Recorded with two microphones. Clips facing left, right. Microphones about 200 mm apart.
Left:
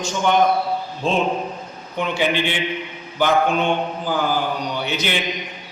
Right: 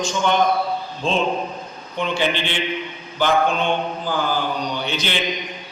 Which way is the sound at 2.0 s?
10° left (ahead or behind).